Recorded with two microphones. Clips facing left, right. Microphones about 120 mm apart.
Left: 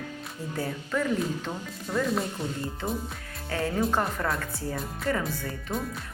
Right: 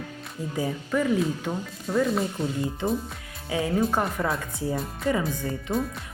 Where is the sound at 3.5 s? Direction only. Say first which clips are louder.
Right 2 dB; 10° right (ahead or behind).